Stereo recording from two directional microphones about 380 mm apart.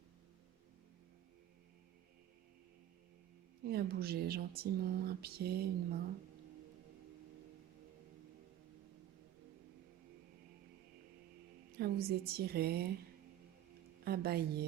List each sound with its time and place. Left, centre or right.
3.6 s speech: right
11.8 s speech: right
14.0 s a woman's voice: right